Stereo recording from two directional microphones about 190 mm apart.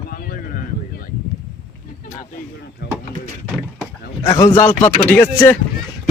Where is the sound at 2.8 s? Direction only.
60° left (ahead or behind).